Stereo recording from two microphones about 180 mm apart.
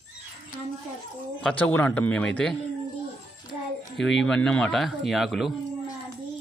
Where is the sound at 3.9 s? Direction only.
5° left (ahead or behind).